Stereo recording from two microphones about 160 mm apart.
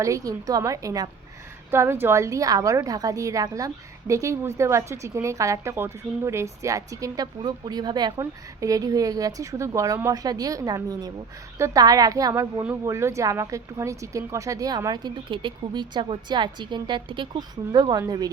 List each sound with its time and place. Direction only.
0.0 s a woman's voice: 20° right (ahead or behind)